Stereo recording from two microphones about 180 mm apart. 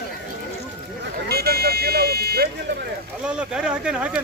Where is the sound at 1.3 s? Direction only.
60° right (ahead or behind).